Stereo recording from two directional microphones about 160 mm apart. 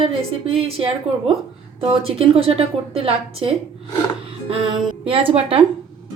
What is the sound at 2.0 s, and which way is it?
A woman's voice, 35° right (ahead or behind).